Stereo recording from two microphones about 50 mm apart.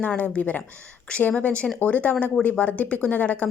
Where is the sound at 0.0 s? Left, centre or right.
Left.